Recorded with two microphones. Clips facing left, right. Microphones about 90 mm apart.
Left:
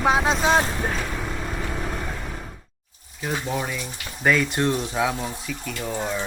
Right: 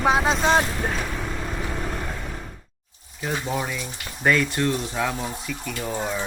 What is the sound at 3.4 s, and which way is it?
Speech, centre (ahead or behind).